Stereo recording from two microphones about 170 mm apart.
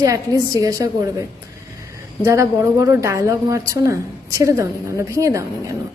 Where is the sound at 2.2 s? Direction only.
15° right (ahead or behind).